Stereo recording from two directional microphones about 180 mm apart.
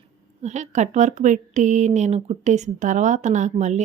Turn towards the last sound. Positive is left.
turn(degrees=-40)  # may be behind; listen again after turning